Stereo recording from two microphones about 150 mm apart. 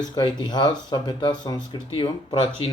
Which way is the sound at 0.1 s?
30° left (ahead or behind).